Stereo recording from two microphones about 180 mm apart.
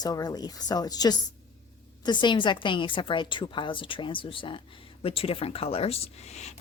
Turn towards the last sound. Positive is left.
turn(degrees=40)  # may be behind; listen again after turning